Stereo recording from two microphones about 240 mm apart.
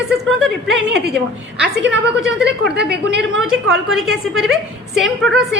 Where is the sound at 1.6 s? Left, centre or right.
Right.